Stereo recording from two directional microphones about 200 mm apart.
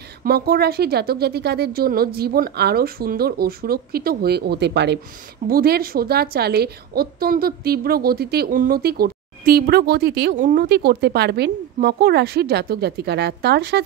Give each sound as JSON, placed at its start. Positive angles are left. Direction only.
{"t": 0.2, "sound": "a woman's voice", "side_deg": -50}
{"t": 5.5, "sound": "a woman's voice", "side_deg": -50}